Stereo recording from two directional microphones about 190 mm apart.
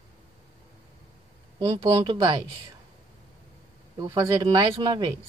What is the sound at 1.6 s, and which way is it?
Speech, 25° right (ahead or behind).